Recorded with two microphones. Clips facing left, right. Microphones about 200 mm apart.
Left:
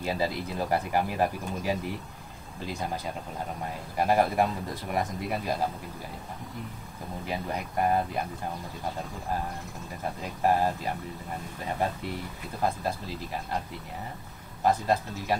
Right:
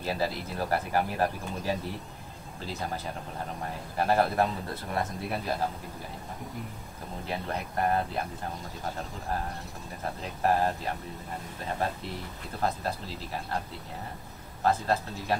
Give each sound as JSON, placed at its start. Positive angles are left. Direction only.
{"t": 0.0, "sound": "speech", "side_deg": 15}
{"t": 3.9, "sound": "speech", "side_deg": 15}
{"t": 7.2, "sound": "speech", "side_deg": 10}
{"t": 10.4, "sound": "speech", "side_deg": 10}
{"t": 12.6, "sound": "speech", "side_deg": 10}
{"t": 14.6, "sound": "speech", "side_deg": 15}